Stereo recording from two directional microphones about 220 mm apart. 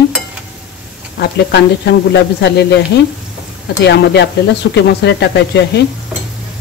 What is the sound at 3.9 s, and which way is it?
Speech, 50° left (ahead or behind).